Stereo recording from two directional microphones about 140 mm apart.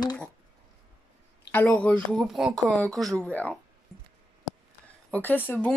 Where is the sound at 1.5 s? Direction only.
10° left (ahead or behind).